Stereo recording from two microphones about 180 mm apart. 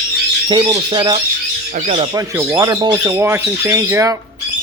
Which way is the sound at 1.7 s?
40° right (ahead or behind).